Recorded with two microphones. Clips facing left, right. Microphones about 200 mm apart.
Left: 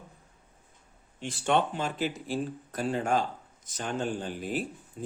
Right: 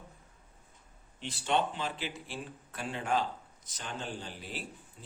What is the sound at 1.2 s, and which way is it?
Speech, 50° left (ahead or behind).